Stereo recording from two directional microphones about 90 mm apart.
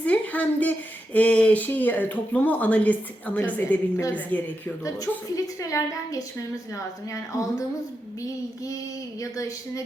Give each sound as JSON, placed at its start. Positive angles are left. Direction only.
{"t": 0.0, "sound": "a sound", "side_deg": 15}
{"t": 1.1, "sound": "speech", "side_deg": 15}
{"t": 4.8, "sound": "a woman's voice", "side_deg": 40}
{"t": 7.3, "sound": "a woman's voice", "side_deg": 35}